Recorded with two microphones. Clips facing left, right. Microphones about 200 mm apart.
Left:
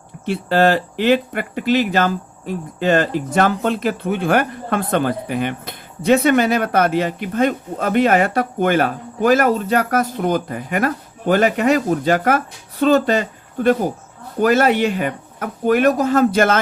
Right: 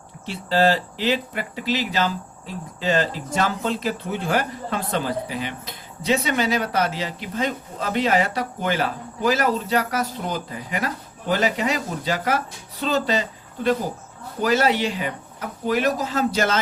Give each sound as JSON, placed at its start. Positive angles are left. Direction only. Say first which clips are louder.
{"t": 0.3, "sound": "speech", "louder": "left 4 dB", "side_deg": 55}